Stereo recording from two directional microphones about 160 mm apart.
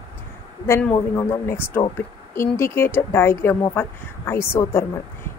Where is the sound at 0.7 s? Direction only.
10° left (ahead or behind).